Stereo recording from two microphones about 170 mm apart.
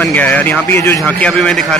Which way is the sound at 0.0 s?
10° left (ahead or behind).